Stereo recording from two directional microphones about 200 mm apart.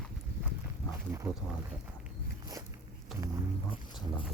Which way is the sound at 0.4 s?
10° right (ahead or behind).